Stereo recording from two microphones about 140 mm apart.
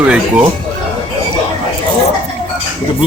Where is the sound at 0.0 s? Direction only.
10° right (ahead or behind).